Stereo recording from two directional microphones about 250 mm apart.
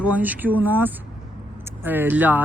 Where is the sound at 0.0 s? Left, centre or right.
Centre.